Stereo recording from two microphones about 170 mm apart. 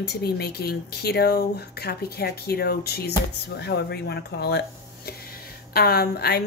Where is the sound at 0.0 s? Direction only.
70° left (ahead or behind).